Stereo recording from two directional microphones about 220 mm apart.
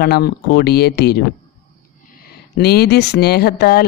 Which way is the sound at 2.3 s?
45° left (ahead or behind).